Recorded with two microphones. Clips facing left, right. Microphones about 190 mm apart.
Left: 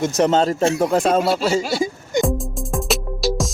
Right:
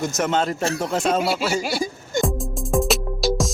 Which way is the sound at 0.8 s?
50° left (ahead or behind).